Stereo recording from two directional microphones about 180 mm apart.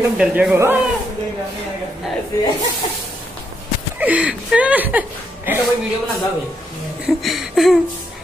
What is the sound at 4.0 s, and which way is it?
Speech, 5° right (ahead or behind).